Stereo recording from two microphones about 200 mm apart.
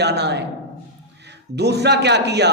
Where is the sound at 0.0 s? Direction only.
55° right (ahead or behind).